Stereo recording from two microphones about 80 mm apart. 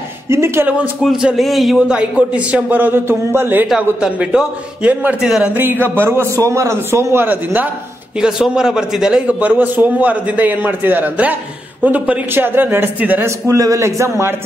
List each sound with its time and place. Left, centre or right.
0.3 s a man's voice: right
1.0 s a man's voice: centre; by 3.6 s right
3.6 s a man's voice: centre; by 7.6 s right
8.2 s a man's voice: centre; by 13.3 s right
13.5 s a man's voice: right